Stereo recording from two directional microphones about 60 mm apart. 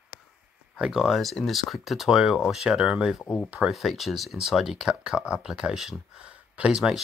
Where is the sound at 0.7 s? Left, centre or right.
Centre.